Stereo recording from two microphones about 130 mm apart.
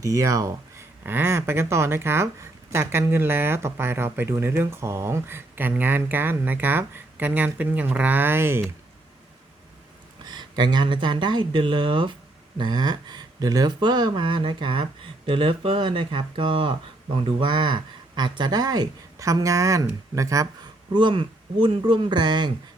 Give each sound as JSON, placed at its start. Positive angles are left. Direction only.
{"t": 0.0, "sound": "speech", "side_deg": -25}
{"t": 1.0, "sound": "speech", "side_deg": -15}
{"t": 10.2, "sound": "speech", "side_deg": -35}
{"t": 20.9, "sound": "speech", "side_deg": -40}